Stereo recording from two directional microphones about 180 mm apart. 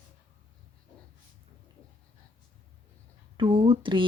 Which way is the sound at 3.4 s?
25° right (ahead or behind).